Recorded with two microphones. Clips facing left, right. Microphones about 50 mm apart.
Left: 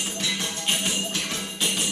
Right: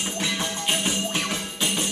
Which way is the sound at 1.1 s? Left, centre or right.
Right.